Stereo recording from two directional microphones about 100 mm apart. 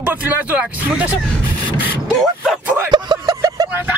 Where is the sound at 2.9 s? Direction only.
40° right (ahead or behind).